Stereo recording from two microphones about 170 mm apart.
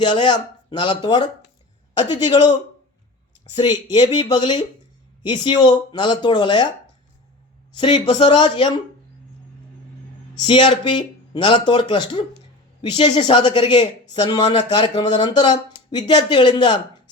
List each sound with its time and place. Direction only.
0.0 s speech: 25° left (ahead or behind)
7.8 s speech: 30° left (ahead or behind)
10.4 s speech: 30° left (ahead or behind)